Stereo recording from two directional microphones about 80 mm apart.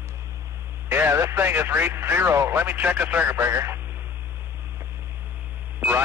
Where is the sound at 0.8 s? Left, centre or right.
Right.